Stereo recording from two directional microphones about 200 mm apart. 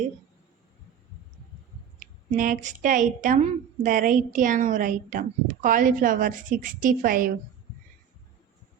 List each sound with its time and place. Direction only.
2.0 s a woman's voice: 40° right (ahead or behind)